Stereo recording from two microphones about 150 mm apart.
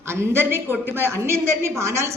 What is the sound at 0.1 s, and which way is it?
A woman's voice, 15° right (ahead or behind).